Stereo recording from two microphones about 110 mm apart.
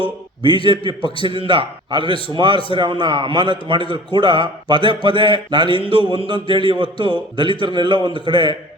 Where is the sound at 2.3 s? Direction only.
45° right (ahead or behind).